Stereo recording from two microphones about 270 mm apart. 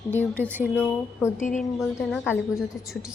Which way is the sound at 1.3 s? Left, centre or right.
Left.